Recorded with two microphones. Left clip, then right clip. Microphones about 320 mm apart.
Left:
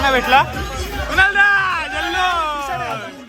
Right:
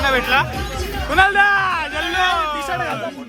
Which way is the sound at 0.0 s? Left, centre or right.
Centre.